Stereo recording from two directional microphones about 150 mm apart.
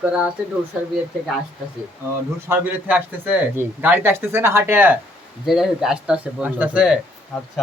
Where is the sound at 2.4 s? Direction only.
10° right (ahead or behind).